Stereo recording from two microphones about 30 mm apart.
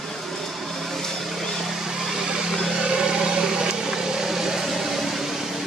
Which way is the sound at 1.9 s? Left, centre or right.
Centre.